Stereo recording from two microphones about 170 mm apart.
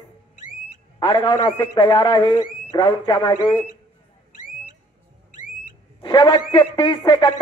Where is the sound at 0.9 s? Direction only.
30° left (ahead or behind).